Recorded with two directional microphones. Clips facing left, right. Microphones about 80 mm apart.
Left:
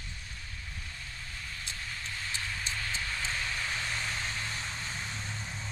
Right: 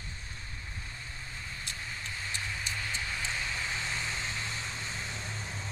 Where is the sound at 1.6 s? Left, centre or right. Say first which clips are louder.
Even; centre.